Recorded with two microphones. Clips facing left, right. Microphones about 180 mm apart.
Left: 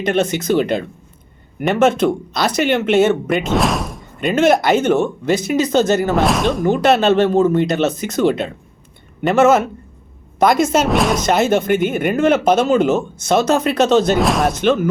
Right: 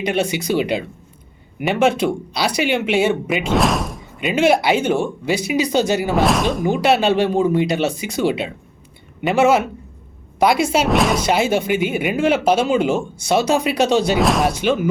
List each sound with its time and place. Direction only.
0.1 s speech: 10° right (ahead or behind)
4.4 s speech: 45° left (ahead or behind)
4.8 s speech: 10° right (ahead or behind)
6.1 s speech: centre (ahead or behind)
10.4 s speech: 45° left (ahead or behind)
10.8 s speech: centre (ahead or behind)
12.2 s speech: 50° left (ahead or behind)
12.5 s speech: 10° right (ahead or behind)
14.2 s speech: centre (ahead or behind)
14.5 s speech: 10° right (ahead or behind)